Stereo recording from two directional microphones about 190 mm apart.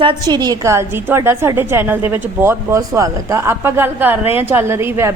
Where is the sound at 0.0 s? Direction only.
25° right (ahead or behind).